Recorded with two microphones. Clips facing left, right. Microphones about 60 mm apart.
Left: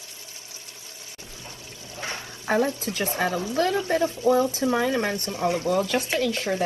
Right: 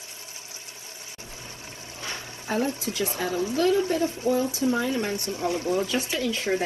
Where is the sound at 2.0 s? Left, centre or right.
Left.